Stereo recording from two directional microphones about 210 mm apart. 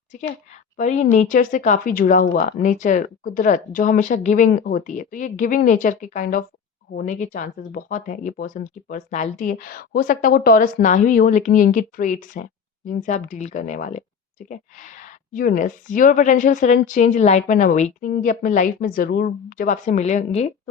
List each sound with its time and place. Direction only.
0.8 s speech: 35° left (ahead or behind)